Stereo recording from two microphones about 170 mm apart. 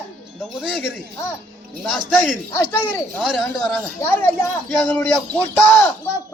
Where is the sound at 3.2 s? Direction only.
Centre (ahead or behind).